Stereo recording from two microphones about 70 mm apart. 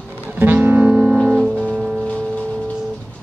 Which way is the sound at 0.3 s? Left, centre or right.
Right.